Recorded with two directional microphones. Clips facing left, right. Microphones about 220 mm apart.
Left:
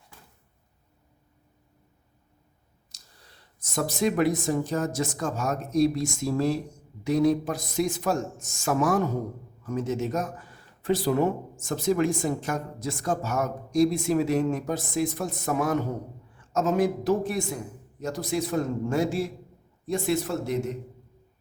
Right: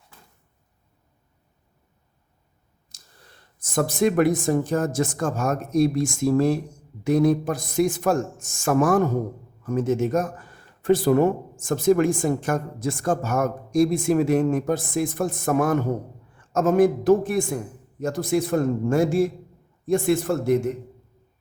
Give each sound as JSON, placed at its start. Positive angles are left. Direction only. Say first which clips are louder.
{"t": 2.9, "sound": "clicking", "louder": "right 2 dB", "side_deg": -50}
{"t": 3.6, "sound": "a woman's voice", "louder": "right 5 dB", "side_deg": -50}